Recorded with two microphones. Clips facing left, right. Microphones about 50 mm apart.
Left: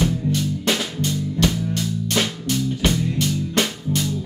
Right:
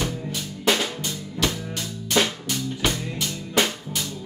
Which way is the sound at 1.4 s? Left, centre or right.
Centre.